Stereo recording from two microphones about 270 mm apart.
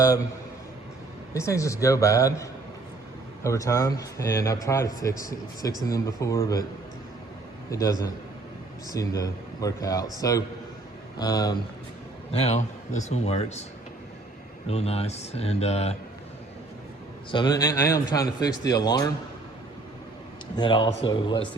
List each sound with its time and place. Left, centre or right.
1.3 s speech: centre
7.7 s a man's voice: centre
14.7 s a man's voice: left
17.3 s speech: centre
20.6 s speech: centre